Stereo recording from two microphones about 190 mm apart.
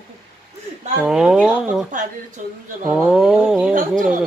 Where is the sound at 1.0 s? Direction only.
5° right (ahead or behind).